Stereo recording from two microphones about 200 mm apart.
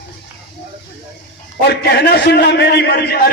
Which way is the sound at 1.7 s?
55° left (ahead or behind).